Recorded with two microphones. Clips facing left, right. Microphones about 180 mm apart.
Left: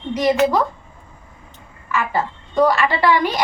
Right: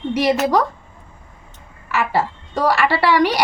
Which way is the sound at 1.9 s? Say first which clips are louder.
Right 2 dB; 80° right.